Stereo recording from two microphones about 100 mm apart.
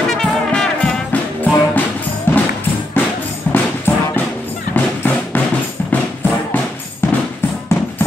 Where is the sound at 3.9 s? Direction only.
25° left (ahead or behind).